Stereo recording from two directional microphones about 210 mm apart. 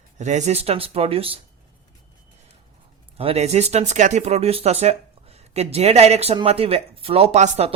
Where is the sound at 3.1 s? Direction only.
30° right (ahead or behind).